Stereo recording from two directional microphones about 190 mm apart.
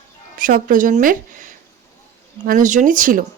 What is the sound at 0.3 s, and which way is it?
A woman's voice, 45° right (ahead or behind).